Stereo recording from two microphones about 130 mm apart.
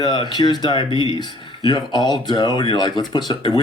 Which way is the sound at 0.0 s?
35° left (ahead or behind).